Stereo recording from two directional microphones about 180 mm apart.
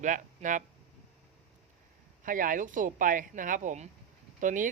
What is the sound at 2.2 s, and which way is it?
Speech, 50° right (ahead or behind).